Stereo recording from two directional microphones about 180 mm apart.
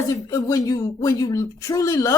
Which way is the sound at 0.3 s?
20° left (ahead or behind).